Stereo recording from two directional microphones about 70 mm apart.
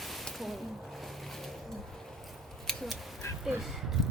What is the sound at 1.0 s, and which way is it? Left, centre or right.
Boat, centre.